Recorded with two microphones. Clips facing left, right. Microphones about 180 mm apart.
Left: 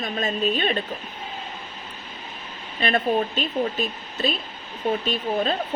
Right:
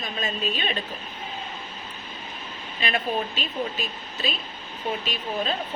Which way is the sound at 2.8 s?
45° left (ahead or behind).